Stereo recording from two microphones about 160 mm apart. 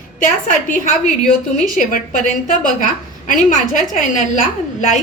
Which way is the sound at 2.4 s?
55° left (ahead or behind).